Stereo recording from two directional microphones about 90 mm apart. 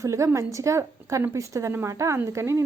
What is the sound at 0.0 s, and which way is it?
A woman's voice, 35° right (ahead or behind).